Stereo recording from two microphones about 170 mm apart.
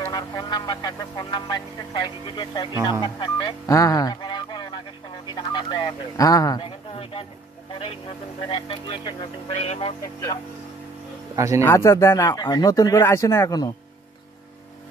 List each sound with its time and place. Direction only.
0.1 s speech: 20° left (ahead or behind)
2.7 s speech: 15° right (ahead or behind)
3.0 s speech: 25° left (ahead or behind)
5.3 s a sound: 25° left (ahead or behind)
6.6 s a sound: 35° left (ahead or behind)
8.5 s speech: 30° left (ahead or behind)
9.6 s speech: 40° left (ahead or behind)
11.3 s speech: 20° right (ahead or behind)
11.6 s speech: 15° left (ahead or behind)